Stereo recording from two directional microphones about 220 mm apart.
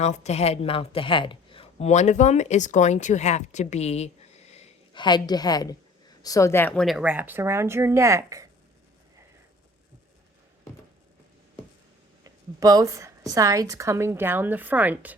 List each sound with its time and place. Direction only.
0.0 s a woman's voice: 30° left (ahead or behind); by 8.4 s 15° right (ahead or behind)
12.2 s a woman's voice: 15° right (ahead or behind)